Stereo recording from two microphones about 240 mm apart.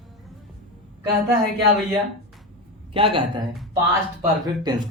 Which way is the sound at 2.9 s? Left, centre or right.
Right.